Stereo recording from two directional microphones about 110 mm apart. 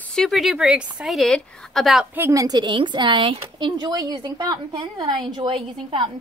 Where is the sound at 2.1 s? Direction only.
20° right (ahead or behind).